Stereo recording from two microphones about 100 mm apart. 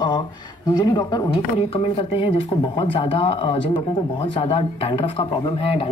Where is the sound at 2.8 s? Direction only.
60° left (ahead or behind).